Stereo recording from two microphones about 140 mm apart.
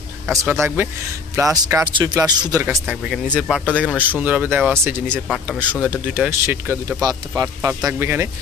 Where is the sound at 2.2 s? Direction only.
30° right (ahead or behind).